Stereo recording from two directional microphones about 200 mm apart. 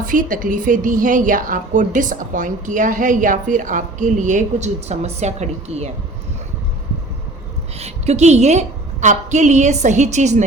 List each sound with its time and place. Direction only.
0.0 s a woman's voice: 40° right (ahead or behind)
7.8 s a woman's voice: 30° right (ahead or behind)